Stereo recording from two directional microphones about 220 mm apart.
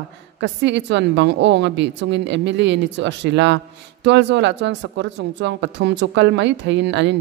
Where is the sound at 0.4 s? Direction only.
55° right (ahead or behind).